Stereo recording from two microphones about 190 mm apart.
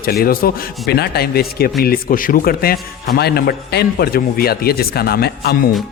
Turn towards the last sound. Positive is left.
turn(degrees=55)  # may be behind; listen again after turning